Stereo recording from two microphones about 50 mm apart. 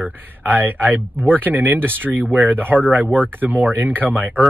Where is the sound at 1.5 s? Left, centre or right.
Right.